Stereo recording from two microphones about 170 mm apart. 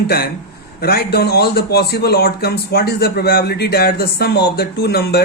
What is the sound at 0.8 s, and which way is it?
A man's voice, 65° left (ahead or behind).